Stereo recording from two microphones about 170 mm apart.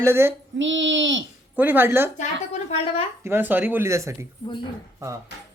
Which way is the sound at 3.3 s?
10° right (ahead or behind).